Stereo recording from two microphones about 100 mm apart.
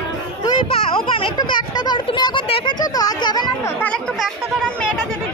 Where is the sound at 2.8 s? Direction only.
40° left (ahead or behind).